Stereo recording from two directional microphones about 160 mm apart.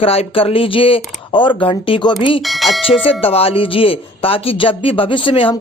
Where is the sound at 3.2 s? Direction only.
35° left (ahead or behind).